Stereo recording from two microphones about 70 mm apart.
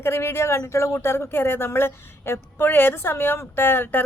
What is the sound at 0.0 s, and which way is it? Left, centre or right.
Speech, left.